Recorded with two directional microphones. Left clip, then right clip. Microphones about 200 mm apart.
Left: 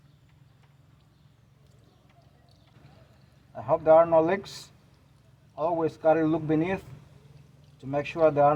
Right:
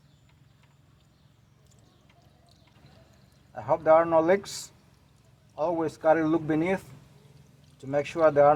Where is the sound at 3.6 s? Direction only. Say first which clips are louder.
Left 2 dB; 25° right (ahead or behind).